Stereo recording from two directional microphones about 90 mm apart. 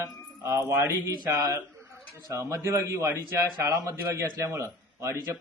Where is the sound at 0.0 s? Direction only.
45° right (ahead or behind).